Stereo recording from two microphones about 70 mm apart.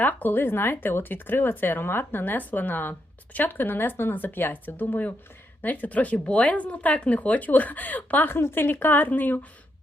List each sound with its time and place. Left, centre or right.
0.0 s speech: left